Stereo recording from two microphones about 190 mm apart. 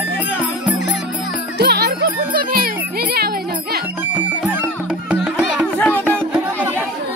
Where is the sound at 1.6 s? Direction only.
60° right (ahead or behind).